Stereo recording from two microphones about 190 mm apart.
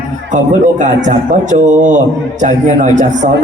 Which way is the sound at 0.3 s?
40° right (ahead or behind).